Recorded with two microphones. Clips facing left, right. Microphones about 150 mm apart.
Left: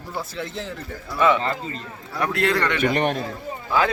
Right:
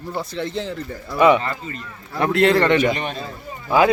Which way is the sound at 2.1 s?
25° right (ahead or behind).